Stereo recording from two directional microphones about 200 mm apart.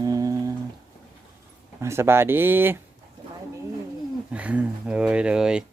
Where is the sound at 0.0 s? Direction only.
15° right (ahead or behind).